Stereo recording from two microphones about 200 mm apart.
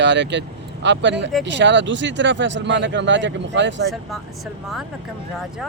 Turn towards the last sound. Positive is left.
turn(degrees=-65)  # may be behind; listen again after turning